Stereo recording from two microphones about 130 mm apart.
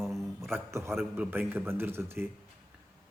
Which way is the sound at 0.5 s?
20° right (ahead or behind).